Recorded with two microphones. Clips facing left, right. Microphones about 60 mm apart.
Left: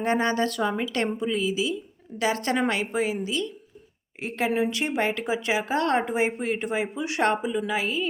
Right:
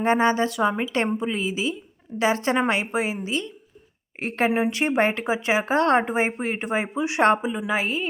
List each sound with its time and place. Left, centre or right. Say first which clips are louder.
0.0 s a woman's voice: right 4 dB; right
4.2 s a woman's voice: right 3 dB; right